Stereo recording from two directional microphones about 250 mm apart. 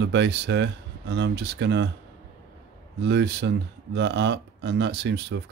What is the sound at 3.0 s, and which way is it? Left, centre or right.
Speech, right.